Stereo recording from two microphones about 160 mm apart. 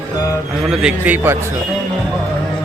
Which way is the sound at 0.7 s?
5° right (ahead or behind).